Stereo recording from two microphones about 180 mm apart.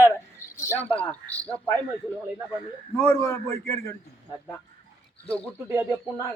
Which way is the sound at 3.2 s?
15° left (ahead or behind).